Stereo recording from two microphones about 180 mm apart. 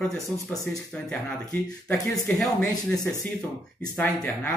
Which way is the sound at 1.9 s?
5° left (ahead or behind).